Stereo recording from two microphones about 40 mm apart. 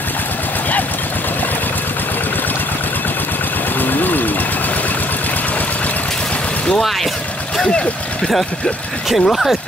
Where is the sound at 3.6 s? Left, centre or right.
Left.